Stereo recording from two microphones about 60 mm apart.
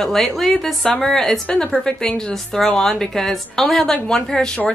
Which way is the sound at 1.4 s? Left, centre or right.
Centre.